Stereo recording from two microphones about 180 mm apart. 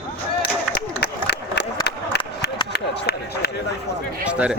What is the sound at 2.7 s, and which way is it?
Run, 65° left (ahead or behind).